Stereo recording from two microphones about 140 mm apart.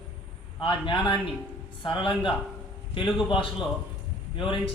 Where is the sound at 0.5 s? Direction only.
35° left (ahead or behind).